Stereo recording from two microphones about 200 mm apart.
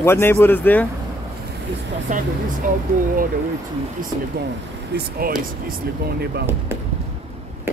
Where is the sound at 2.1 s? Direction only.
40° right (ahead or behind).